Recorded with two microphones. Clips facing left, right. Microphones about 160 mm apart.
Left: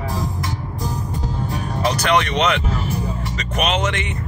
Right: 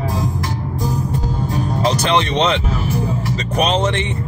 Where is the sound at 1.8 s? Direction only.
30° right (ahead or behind).